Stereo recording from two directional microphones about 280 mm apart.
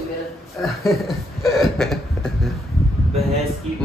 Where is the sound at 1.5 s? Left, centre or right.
Centre.